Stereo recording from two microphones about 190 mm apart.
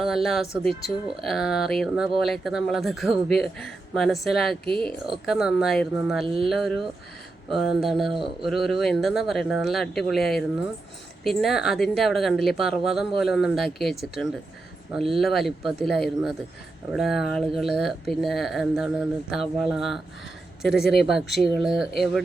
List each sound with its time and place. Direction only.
0.0 s speech: centre (ahead or behind)
8.1 s speech: 25° right (ahead or behind)
8.4 s speech: centre (ahead or behind)
14.9 s speech: centre (ahead or behind)